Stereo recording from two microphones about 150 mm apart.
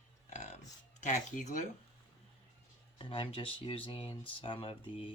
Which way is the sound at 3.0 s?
35° left (ahead or behind).